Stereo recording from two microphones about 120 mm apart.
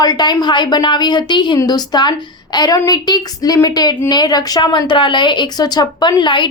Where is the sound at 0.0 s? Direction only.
35° left (ahead or behind).